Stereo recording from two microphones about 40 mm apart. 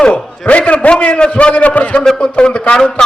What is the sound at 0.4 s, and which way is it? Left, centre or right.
A man's voice, left.